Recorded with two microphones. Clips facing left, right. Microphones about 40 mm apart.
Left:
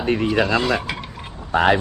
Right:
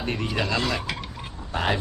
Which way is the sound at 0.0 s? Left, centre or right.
Centre.